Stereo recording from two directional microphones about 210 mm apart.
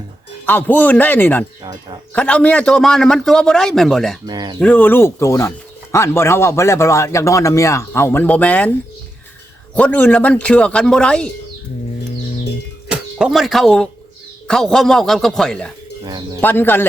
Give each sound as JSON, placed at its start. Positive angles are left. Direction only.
{"t": 0.4, "sound": "a man's voice", "side_deg": 10}
{"t": 4.3, "sound": "speech", "side_deg": -20}
{"t": 4.6, "sound": "speech", "side_deg": 10}
{"t": 9.7, "sound": "a man's voice", "side_deg": 5}
{"t": 12.9, "sound": "a man's voice", "side_deg": -5}